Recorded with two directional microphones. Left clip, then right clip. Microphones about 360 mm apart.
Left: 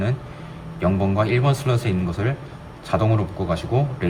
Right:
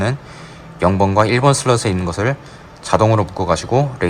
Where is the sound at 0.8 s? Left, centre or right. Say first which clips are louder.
Right 8 dB; centre.